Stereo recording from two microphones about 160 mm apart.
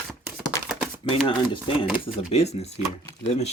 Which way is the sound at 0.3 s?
5° right (ahead or behind).